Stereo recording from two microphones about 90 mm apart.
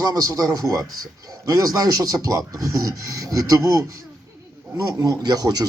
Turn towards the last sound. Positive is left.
turn(degrees=-45)  # may be behind; listen again after turning